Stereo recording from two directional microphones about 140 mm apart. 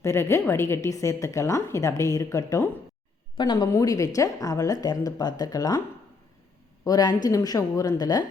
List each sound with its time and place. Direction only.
0.0 s a woman's voice: 20° left (ahead or behind)
6.8 s a woman's voice: 30° left (ahead or behind)